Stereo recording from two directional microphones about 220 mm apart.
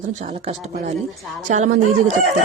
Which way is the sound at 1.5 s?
30° right (ahead or behind).